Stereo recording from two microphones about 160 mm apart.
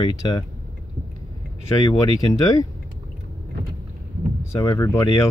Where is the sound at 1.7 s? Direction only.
20° left (ahead or behind).